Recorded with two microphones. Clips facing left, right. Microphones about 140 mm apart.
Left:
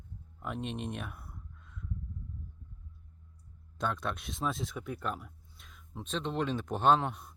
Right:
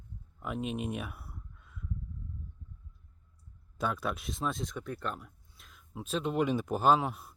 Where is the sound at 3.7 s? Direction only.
5° right (ahead or behind).